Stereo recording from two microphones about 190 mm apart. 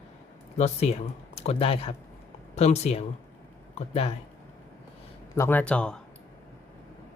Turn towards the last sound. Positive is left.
turn(degrees=5)  # may be behind; listen again after turning